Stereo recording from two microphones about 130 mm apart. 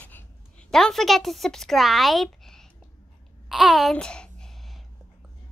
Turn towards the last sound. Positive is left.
turn(degrees=5)  # may be behind; listen again after turning